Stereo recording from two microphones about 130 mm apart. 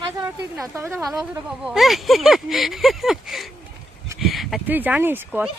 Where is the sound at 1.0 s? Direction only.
Centre (ahead or behind).